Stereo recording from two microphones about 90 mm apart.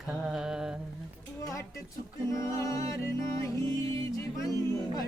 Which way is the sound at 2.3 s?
35° left (ahead or behind).